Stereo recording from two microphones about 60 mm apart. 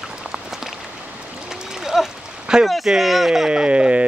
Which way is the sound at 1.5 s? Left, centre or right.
Centre.